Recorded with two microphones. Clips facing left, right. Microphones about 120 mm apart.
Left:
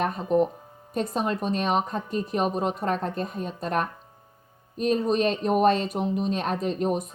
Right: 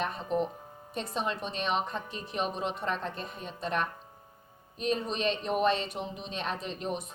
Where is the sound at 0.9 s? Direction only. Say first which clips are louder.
Left 7 dB; 45° left (ahead or behind).